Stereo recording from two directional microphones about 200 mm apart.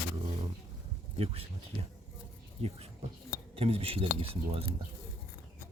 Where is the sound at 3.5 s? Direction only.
30° right (ahead or behind).